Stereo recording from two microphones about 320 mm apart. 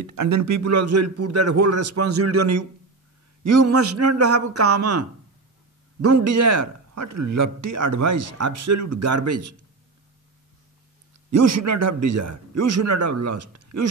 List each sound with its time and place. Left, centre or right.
0.0 s a man's voice: right
11.2 s a man's voice: right